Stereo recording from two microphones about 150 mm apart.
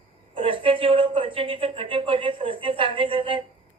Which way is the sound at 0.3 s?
35° right (ahead or behind).